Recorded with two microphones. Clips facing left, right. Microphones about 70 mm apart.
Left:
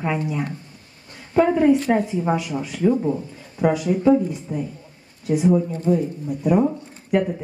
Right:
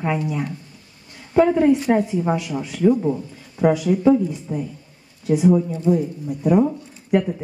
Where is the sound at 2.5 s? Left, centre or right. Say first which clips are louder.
Even; centre.